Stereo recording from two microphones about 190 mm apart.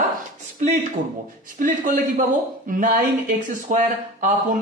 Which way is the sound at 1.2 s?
45° right (ahead or behind).